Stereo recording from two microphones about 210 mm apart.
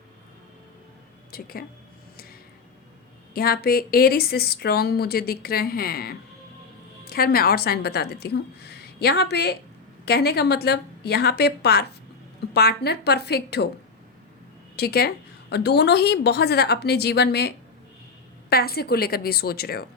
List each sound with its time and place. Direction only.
1.3 s speech: 45° left (ahead or behind)
3.3 s speech: 45° left (ahead or behind)
14.8 s speech: 50° left (ahead or behind)